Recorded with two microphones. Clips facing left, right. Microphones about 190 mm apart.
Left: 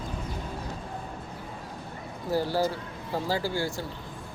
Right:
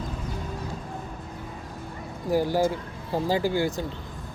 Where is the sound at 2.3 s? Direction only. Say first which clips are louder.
Right 3 dB; 15° right (ahead or behind).